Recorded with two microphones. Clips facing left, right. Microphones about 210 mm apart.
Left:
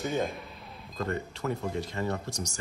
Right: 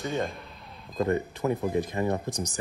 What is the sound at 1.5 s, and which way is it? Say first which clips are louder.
Speech: right 5 dB; 15° right (ahead or behind).